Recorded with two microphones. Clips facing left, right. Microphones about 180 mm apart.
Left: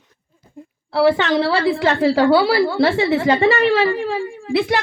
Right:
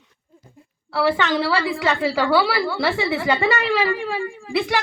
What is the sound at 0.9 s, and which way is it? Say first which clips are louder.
A woman's voice: left 5 dB; 25° left (ahead or behind).